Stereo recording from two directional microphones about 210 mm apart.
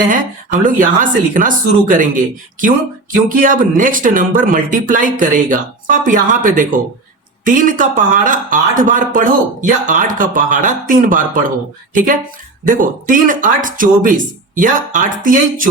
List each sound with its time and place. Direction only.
0.6 s speech: 40° right (ahead or behind)